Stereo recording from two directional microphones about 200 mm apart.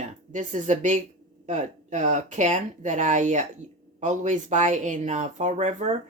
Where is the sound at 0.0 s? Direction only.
40° right (ahead or behind).